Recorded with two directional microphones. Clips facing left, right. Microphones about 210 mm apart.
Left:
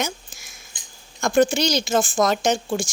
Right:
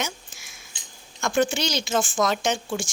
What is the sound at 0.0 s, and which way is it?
Mouse, 40° left (ahead or behind).